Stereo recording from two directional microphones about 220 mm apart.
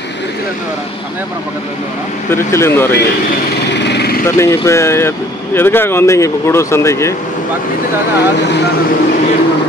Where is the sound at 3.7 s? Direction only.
50° left (ahead or behind).